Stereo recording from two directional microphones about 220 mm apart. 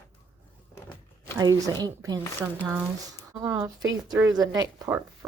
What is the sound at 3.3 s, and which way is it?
Speech, 15° right (ahead or behind).